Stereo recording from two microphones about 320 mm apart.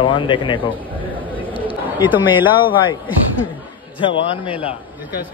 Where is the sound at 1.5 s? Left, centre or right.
Centre.